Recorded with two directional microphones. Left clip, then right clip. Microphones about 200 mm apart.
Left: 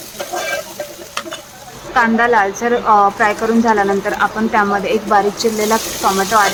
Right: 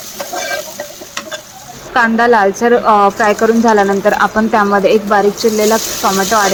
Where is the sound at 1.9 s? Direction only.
15° right (ahead or behind).